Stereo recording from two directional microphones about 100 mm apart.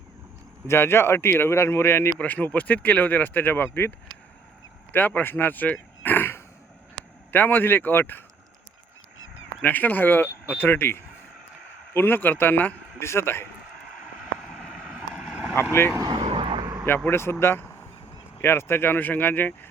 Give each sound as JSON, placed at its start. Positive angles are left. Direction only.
{"t": 0.7, "sound": "speech", "side_deg": 25}
{"t": 9.6, "sound": "speech", "side_deg": 15}
{"t": 16.0, "sound": "vehicle", "side_deg": -40}
{"t": 16.8, "sound": "speech", "side_deg": 20}
{"t": 17.4, "sound": "vehicle", "side_deg": 25}
{"t": 18.4, "sound": "speech", "side_deg": 20}